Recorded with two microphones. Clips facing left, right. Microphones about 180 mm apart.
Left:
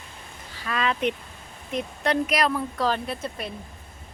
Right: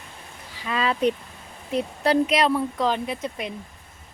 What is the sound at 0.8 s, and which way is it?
Speech, 35° right (ahead or behind).